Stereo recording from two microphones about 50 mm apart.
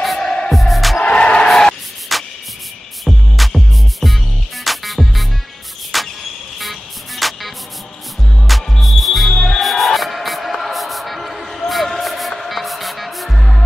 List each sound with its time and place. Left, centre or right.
0.0 s music: centre
0.6 s music: centre
0.9 s music: left
1.5 s a sound: centre
2.1 s music: centre
5.9 s cricket: centre
6.6 s music: centre